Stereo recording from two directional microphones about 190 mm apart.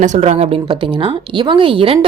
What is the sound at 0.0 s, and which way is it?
A woman's voice, 35° right (ahead or behind).